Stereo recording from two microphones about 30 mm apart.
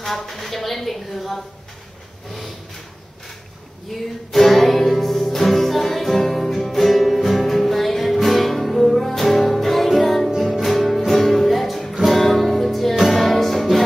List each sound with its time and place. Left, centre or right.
0.0 s a woman's voice: centre
3.9 s a woman's voice: centre
4.3 s music: centre